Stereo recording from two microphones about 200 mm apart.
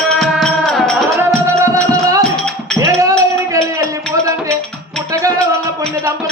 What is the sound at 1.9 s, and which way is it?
Music, 15° right (ahead or behind).